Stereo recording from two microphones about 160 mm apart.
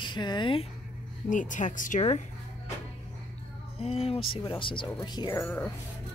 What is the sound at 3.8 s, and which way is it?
Speech, 40° left (ahead or behind).